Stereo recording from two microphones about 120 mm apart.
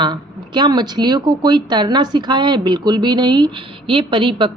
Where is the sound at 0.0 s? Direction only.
40° right (ahead or behind).